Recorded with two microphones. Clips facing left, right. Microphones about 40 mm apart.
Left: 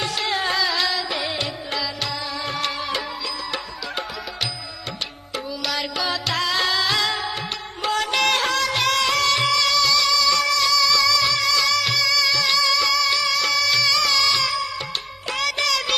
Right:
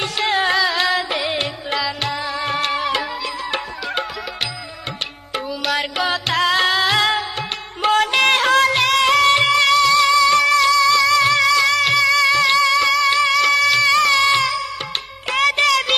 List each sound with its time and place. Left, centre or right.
0.0 s music: right
5.3 s music: right